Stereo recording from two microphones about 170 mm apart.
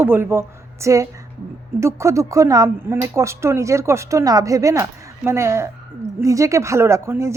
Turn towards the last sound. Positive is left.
turn(degrees=-15)  # may be behind; listen again after turning